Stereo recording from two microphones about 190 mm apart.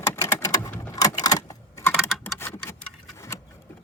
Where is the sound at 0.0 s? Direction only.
15° left (ahead or behind).